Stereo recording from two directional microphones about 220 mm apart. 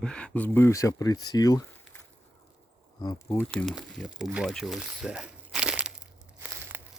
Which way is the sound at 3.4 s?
5° left (ahead or behind).